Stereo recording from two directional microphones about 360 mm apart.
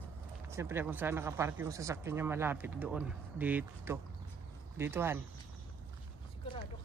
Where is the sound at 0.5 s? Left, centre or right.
Centre.